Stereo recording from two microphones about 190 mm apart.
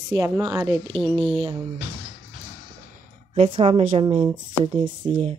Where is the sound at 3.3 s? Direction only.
30° right (ahead or behind).